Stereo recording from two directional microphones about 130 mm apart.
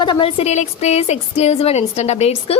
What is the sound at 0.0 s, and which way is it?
A woman's voice, 40° left (ahead or behind).